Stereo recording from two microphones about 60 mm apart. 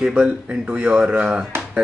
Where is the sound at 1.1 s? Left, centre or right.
Right.